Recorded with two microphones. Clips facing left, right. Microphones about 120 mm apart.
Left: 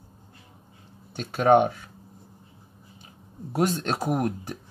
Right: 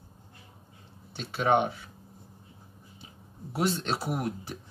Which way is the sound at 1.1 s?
45° left (ahead or behind).